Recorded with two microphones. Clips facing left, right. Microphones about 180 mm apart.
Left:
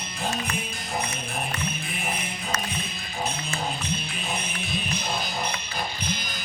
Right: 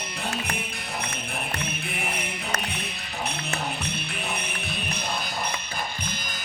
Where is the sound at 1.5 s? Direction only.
65° right (ahead or behind).